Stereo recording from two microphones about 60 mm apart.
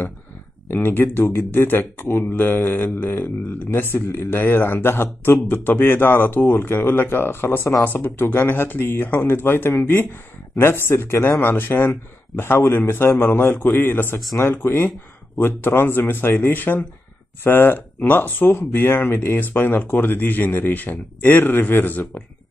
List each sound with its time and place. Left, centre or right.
0.7 s speech: left